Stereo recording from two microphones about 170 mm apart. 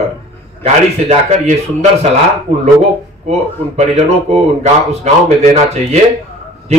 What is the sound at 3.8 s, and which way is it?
A man's voice, 40° right (ahead or behind).